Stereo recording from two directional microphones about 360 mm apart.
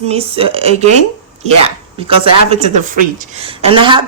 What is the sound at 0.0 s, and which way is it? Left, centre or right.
Speech, centre.